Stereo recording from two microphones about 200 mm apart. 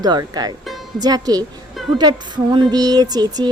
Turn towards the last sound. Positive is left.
turn(degrees=-20)  # may be behind; listen again after turning